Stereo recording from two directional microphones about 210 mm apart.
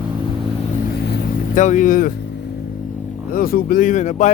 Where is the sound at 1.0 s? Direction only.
50° left (ahead or behind).